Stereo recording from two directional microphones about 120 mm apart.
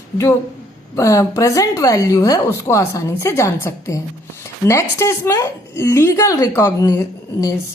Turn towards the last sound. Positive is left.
turn(degrees=25)  # may be behind; listen again after turning